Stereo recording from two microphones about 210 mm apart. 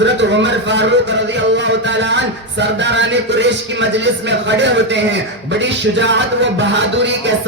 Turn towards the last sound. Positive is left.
turn(degrees=-55)  # may be behind; listen again after turning